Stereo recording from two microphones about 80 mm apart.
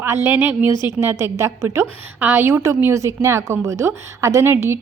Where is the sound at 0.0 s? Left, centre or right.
Right.